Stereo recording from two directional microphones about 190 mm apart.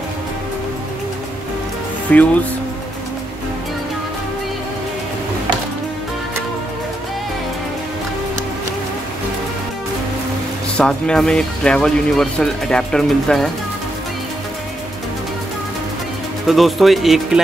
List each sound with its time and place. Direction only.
2.1 s speech: 5° left (ahead or behind)
10.8 s speech: 5° left (ahead or behind)
16.4 s speech: centre (ahead or behind)